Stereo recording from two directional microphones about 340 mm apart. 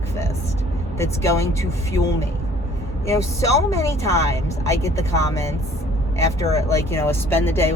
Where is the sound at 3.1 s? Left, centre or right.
Centre.